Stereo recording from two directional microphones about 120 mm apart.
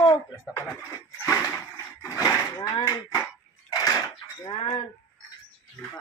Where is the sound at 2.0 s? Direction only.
30° left (ahead or behind).